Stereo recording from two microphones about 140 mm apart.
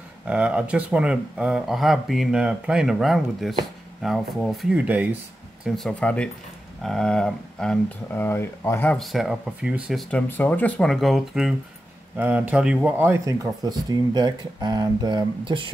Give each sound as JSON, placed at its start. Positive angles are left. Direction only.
{"t": 0.3, "sound": "speech", "side_deg": -5}
{"t": 5.7, "sound": "speech", "side_deg": 5}
{"t": 8.9, "sound": "speech", "side_deg": 0}
{"t": 10.1, "sound": "speech", "side_deg": 15}